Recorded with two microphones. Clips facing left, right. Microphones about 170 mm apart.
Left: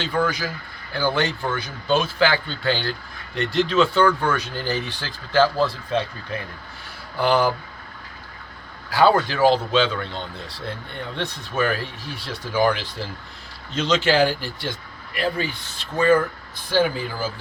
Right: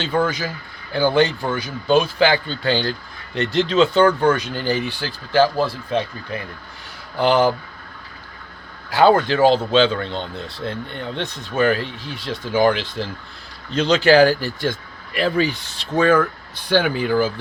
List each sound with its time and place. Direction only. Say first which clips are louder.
0.0 s speech: right 3 dB; 25° right (ahead or behind)
7.2 s speech: right 3 dB; 20° right (ahead or behind)
8.9 s speech: right 3 dB; 20° right (ahead or behind)
13.7 s speech: right 5 dB; 35° right (ahead or behind)
15.1 s speech: right 5 dB; 80° right; by 17.4 s 65° right (ahead or behind)